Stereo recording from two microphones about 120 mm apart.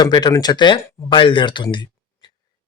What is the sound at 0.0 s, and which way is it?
Speech, 35° left (ahead or behind).